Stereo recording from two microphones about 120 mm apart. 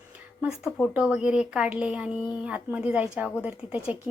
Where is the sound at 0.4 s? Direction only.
5° right (ahead or behind).